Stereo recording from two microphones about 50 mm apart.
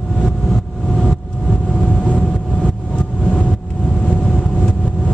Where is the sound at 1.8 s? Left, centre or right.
Left.